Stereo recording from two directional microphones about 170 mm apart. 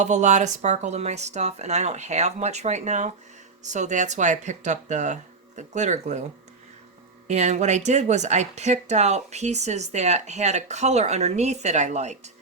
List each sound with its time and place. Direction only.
0.0 s speech: 45° right (ahead or behind)
7.3 s speech: 45° right (ahead or behind)